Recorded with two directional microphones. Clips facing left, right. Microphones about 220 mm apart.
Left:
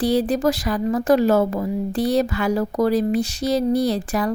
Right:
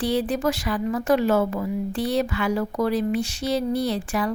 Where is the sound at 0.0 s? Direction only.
40° left (ahead or behind).